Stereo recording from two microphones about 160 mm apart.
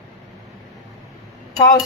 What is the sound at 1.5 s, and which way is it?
Speech, 20° left (ahead or behind).